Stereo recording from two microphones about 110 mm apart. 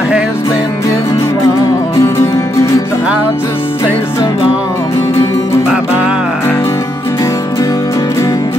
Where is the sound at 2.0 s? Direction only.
25° left (ahead or behind).